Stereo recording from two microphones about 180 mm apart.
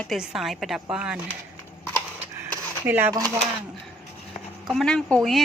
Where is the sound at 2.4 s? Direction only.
10° right (ahead or behind).